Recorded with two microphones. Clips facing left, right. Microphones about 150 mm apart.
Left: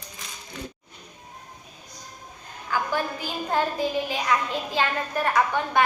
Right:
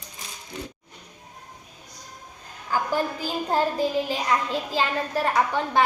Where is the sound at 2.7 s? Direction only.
40° right (ahead or behind).